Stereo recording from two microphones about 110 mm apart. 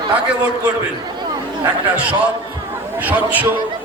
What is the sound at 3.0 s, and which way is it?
Speech, 15° right (ahead or behind).